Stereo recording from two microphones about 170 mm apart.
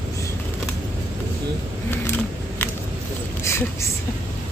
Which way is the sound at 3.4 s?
15° left (ahead or behind).